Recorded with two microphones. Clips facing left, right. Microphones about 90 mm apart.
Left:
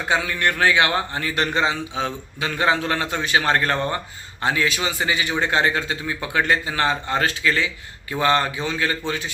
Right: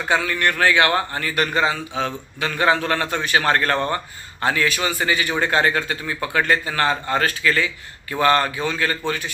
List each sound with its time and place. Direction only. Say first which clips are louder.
0.1 s a man's voice: right 1 dB; 20° left (ahead or behind)